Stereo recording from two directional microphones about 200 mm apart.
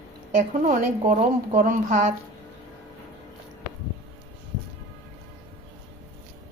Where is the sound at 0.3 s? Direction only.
40° right (ahead or behind).